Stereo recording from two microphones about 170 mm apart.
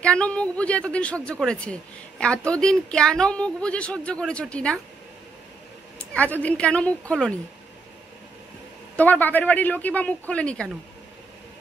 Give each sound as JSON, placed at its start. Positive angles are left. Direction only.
{"t": 0.0, "sound": "a woman's voice", "side_deg": 5}
{"t": 5.9, "sound": "a woman's voice", "side_deg": 10}
{"t": 8.9, "sound": "a woman's voice", "side_deg": 10}